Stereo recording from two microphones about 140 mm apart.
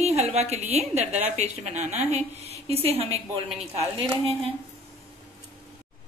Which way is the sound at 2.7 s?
45° right (ahead or behind).